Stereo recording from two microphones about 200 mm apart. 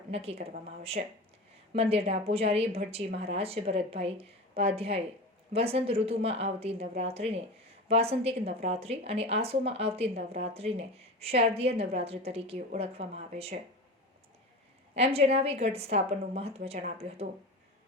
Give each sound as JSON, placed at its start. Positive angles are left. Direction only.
{"t": 0.1, "sound": "a woman's voice", "side_deg": -30}
{"t": 1.7, "sound": "a woman's voice", "side_deg": -30}
{"t": 14.9, "sound": "a woman's voice", "side_deg": -30}